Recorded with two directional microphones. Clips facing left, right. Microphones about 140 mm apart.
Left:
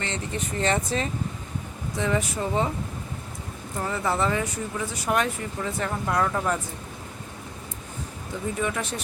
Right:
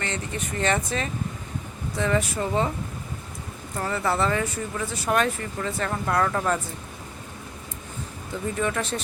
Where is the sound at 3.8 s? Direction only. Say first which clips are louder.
Right 1 dB; 15° left (ahead or behind).